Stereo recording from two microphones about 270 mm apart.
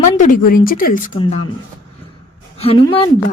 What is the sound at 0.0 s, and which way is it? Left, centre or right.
Speech, left.